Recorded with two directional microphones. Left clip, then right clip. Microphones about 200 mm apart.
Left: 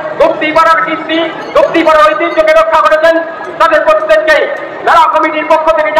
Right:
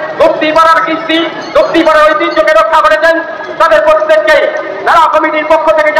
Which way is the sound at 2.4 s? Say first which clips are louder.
Even; 30° right (ahead or behind).